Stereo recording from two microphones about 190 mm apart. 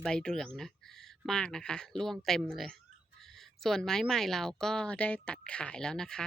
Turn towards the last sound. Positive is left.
turn(degrees=5)  # may be behind; listen again after turning